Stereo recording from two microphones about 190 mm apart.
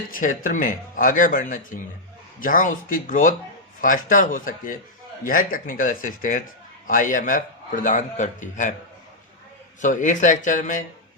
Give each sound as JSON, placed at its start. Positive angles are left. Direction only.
{"t": 0.1, "sound": "speech", "side_deg": 45}
{"t": 9.8, "sound": "speech", "side_deg": 40}